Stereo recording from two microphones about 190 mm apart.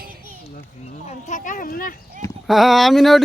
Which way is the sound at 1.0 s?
40° left (ahead or behind).